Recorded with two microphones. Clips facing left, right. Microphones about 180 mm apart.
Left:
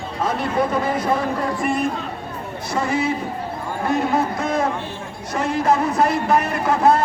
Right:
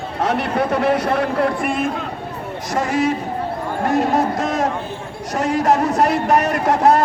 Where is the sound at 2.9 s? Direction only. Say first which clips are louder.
Right 3 dB; 90° right.